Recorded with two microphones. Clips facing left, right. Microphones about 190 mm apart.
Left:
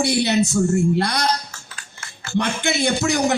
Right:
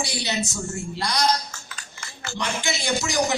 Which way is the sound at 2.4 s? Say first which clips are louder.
Left 7 dB; 60° left (ahead or behind).